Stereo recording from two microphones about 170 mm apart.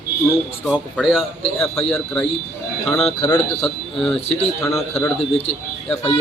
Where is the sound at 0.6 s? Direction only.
Centre (ahead or behind).